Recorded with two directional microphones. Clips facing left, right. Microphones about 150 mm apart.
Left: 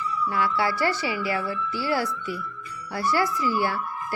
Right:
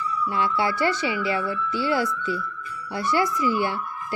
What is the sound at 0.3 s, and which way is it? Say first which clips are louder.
A woman's voice: right 1 dB; 20° right (ahead or behind).